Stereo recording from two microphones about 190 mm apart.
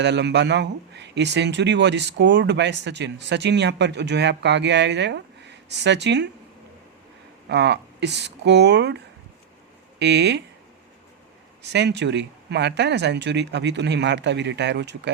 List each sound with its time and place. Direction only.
0.0 s speech: 65° right (ahead or behind)
7.4 s speech: 65° right (ahead or behind)
10.0 s speech: 65° right (ahead or behind)
11.6 s speech: 65° right (ahead or behind)